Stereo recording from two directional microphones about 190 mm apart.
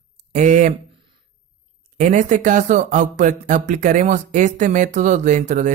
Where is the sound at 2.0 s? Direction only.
40° right (ahead or behind).